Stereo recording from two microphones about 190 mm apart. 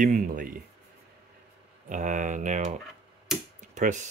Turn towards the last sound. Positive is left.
turn(degrees=-40)  # may be behind; listen again after turning